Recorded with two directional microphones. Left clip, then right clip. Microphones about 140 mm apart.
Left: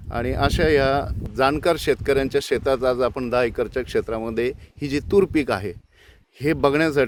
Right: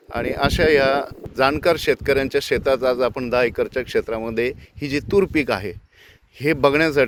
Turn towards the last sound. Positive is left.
turn(degrees=30)  # may be behind; listen again after turning